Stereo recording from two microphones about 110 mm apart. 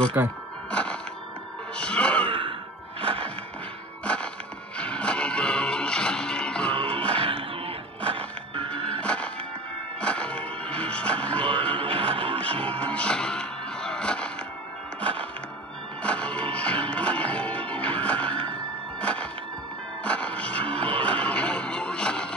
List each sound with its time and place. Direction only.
0.2 s speech: 20° right (ahead or behind)
0.7 s music: 10° left (ahead or behind)
1.8 s gasp: 10° left (ahead or behind)
2.2 s sigh: 55° right (ahead or behind)
3.0 s music: 60° right (ahead or behind)
4.0 s music: 10° left (ahead or behind)
7.1 s music: 60° right (ahead or behind)
8.6 s music: 10° left (ahead or behind)
11.8 s music: 60° right (ahead or behind)
12.4 s music: 10° left (ahead or behind)